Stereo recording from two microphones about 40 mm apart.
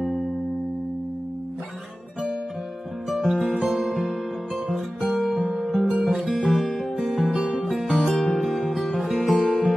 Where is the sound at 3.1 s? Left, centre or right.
Centre.